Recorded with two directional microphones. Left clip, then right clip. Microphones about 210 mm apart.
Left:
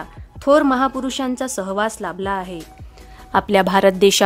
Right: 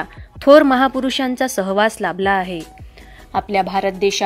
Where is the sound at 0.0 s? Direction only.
10° right (ahead or behind).